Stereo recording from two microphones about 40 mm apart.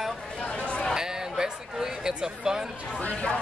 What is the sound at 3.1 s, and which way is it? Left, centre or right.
Speech, left.